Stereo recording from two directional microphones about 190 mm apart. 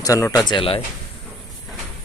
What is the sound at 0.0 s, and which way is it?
Speech, 15° left (ahead or behind).